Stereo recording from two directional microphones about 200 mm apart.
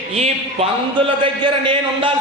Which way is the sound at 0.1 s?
30° right (ahead or behind).